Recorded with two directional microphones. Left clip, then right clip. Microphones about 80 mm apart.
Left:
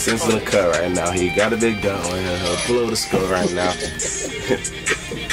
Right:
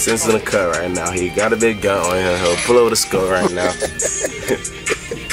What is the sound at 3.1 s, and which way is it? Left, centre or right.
Speech, centre.